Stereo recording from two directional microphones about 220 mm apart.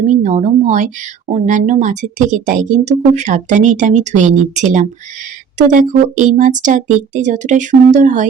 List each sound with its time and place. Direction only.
0.0 s speech: 35° right (ahead or behind)